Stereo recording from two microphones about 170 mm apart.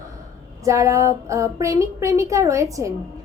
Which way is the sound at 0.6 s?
20° right (ahead or behind).